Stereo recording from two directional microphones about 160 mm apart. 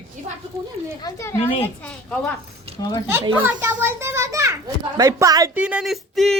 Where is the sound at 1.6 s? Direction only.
5° left (ahead or behind).